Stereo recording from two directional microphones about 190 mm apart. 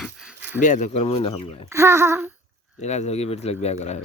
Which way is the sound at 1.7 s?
15° right (ahead or behind).